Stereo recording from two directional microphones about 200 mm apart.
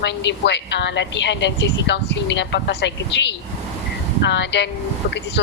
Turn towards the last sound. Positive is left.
turn(degrees=60)  # may be behind; listen again after turning